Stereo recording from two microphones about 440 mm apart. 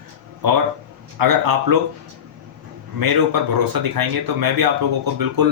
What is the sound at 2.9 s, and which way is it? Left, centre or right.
Speech, right.